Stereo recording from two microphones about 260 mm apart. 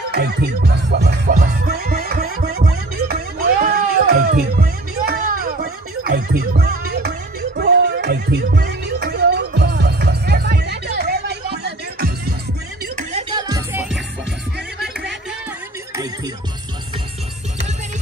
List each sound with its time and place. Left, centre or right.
0.1 s music: right
12.9 s music: right